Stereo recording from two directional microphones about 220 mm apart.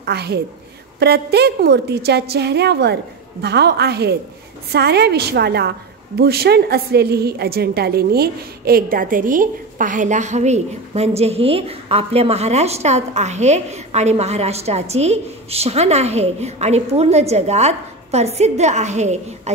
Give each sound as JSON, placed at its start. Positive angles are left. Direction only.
{"t": 0.0, "sound": "a woman's voice", "side_deg": -45}